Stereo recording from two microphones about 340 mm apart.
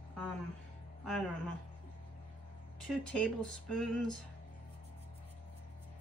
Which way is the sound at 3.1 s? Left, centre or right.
Centre.